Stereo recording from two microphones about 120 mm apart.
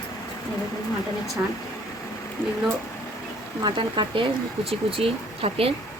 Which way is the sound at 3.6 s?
45° right (ahead or behind).